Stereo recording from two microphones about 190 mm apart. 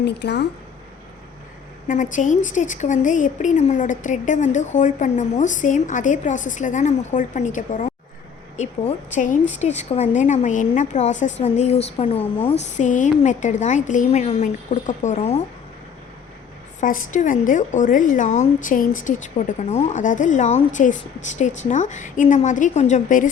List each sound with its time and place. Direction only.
0.0 s speech: 60° left (ahead or behind)
1.9 s speech: 40° left (ahead or behind)
16.8 s speech: 45° left (ahead or behind)